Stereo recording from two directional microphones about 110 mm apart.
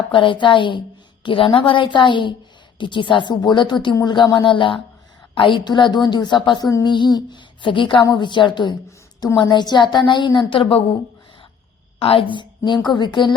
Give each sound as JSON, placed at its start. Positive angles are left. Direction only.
{"t": 0.1, "sound": "a woman's voice", "side_deg": 50}
{"t": 11.9, "sound": "a woman's voice", "side_deg": 60}